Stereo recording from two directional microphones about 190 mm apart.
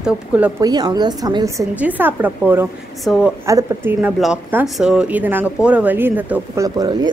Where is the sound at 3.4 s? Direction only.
15° right (ahead or behind).